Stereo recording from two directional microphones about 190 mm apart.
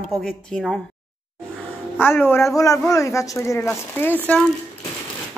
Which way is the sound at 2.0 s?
10° left (ahead or behind).